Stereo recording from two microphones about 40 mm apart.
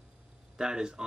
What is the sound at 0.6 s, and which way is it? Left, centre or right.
Speech, centre.